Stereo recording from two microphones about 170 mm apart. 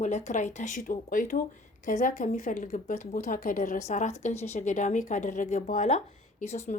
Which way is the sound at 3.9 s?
40° left (ahead or behind).